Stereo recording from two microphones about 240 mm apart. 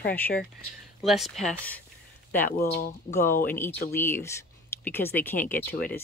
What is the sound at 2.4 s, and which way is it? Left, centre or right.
Speech, left.